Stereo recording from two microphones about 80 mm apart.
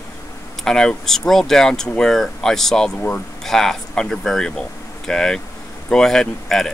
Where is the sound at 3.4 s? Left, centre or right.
Centre.